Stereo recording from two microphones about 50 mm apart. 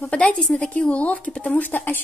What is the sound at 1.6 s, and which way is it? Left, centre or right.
Speech, left.